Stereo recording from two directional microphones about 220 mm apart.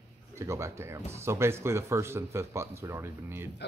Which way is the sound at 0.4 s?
15° right (ahead or behind).